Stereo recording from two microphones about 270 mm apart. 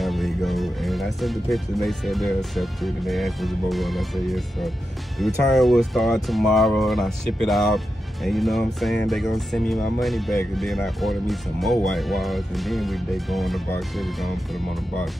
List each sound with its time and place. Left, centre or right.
0.0 s speech: centre